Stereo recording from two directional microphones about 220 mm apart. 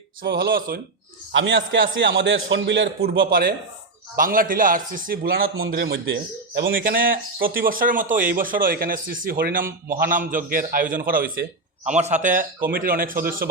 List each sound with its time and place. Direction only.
0.2 s speech: 45° right (ahead or behind)
1.3 s a man's voice: 60° right (ahead or behind); by 13.5 s 40° right (ahead or behind)